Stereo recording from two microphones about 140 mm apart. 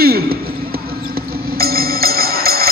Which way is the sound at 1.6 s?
90° right.